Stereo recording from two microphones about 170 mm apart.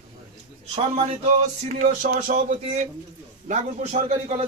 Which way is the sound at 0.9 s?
35° right (ahead or behind).